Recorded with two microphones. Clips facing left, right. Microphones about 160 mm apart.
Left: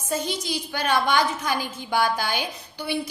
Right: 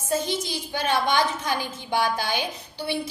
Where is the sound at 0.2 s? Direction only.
25° right (ahead or behind).